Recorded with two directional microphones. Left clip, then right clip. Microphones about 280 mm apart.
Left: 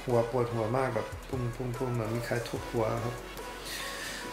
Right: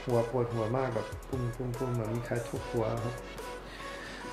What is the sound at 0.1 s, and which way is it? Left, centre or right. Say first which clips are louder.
Speech: left 2 dB; right.